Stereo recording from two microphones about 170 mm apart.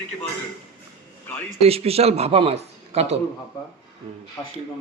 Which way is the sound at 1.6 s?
35° right (ahead or behind).